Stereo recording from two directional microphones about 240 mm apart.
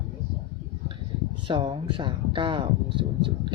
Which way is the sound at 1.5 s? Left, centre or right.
Right.